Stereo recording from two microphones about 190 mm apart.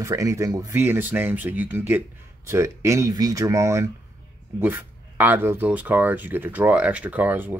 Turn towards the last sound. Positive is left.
turn(degrees=-10)  # may be behind; listen again after turning